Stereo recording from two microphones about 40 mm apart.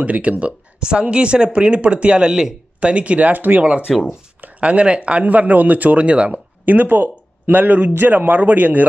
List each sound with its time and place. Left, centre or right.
0.0 s a man's voice: right
3.6 s a man's voice: right
5.2 s a man's voice: right
6.3 s speech: right